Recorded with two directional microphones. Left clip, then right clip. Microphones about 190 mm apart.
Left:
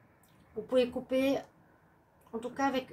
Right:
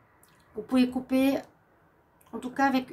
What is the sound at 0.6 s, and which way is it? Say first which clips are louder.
Speech: right 1 dB; 55° right (ahead or behind).